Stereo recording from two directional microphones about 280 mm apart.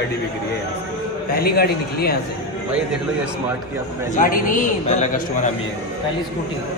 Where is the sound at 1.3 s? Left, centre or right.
Left.